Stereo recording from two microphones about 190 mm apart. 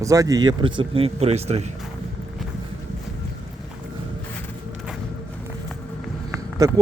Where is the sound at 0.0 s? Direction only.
15° right (ahead or behind); by 1.6 s 35° right (ahead or behind).